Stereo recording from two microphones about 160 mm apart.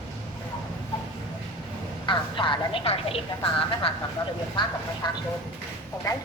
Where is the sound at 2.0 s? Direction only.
30° left (ahead or behind).